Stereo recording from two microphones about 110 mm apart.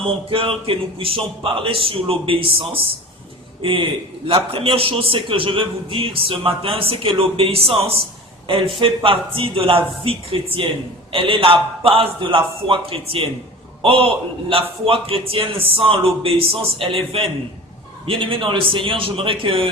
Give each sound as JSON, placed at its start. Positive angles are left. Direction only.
{"t": 0.0, "sound": "a man's voice", "side_deg": -55}